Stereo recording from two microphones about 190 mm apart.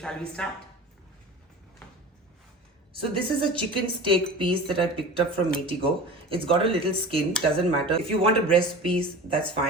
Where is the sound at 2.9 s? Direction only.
30° right (ahead or behind).